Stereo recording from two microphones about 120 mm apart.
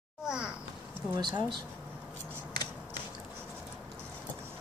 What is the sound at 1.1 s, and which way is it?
Speech, 40° right (ahead or behind).